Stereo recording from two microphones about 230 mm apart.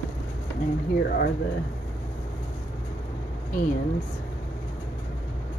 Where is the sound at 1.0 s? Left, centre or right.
Left.